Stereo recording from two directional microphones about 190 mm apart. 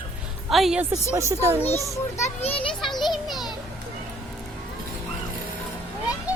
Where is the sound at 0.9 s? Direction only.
15° right (ahead or behind).